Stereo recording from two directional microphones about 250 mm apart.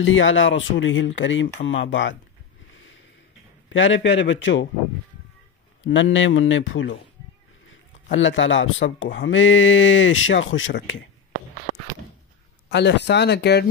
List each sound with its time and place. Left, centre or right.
0.0 s speech: left
3.6 s speech: left
5.9 s speech: left
8.1 s speech: left
12.6 s speech: left